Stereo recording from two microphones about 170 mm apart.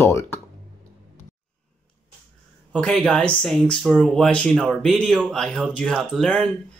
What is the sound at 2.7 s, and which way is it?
Speech, 5° left (ahead or behind).